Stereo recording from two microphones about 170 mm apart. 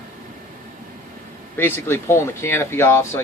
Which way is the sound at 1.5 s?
15° left (ahead or behind).